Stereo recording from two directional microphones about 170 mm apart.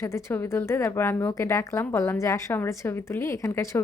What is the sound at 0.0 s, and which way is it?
Speech, 15° left (ahead or behind).